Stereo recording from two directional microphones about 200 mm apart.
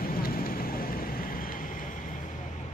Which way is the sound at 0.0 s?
45° left (ahead or behind).